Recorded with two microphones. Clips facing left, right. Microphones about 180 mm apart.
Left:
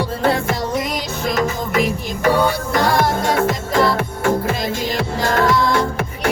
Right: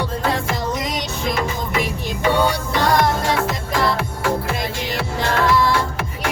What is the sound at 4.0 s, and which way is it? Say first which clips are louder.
Music: left 3 dB; 50° left (ahead or behind).